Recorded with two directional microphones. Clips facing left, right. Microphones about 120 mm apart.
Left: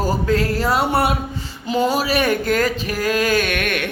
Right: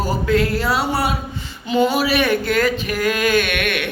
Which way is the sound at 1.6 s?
40° left (ahead or behind).